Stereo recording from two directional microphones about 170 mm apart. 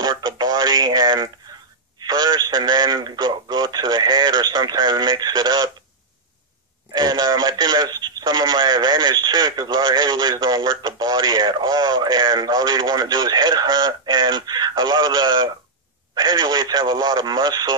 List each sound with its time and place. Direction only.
0.0 s a sound: 25° right (ahead or behind)
2.0 s speech: 25° right (ahead or behind)
6.9 s speech: 25° right (ahead or behind)